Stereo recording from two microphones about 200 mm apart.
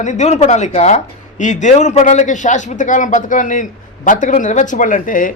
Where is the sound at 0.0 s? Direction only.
35° left (ahead or behind).